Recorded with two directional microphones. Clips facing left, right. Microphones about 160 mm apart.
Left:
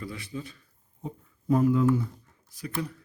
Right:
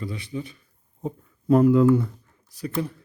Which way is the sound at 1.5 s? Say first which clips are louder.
Right 6 dB; 70° right (ahead or behind).